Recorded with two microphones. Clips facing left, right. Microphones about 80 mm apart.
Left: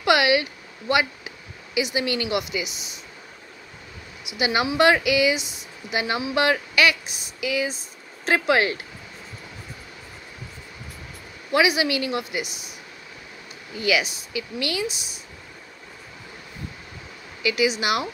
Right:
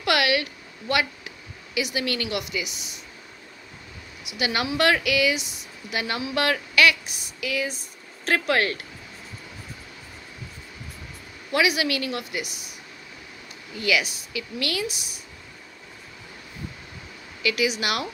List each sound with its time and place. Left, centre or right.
0.0 s a sound: centre
2.0 s speech: centre
4.4 s speech: centre
5.9 s speech: centre
11.5 s speech: centre
13.7 s speech: centre
14.9 s speech: right
17.4 s speech: centre